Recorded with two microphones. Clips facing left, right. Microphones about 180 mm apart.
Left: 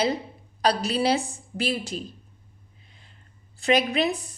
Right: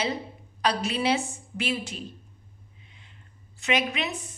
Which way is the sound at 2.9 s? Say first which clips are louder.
Even; 35° left (ahead or behind).